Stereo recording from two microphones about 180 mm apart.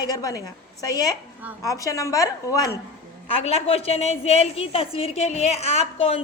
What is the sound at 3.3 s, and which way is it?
A woman's voice, 35° left (ahead or behind).